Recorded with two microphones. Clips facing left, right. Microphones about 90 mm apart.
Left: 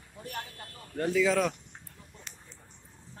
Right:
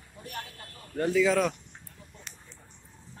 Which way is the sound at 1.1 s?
10° right (ahead or behind).